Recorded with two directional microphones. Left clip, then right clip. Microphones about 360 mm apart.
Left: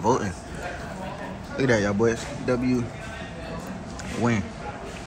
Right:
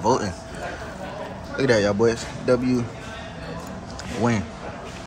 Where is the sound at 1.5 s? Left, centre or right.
Centre.